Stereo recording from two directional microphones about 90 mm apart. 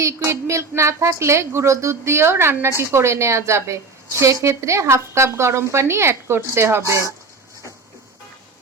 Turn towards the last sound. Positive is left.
turn(degrees=-30)  # may be behind; listen again after turning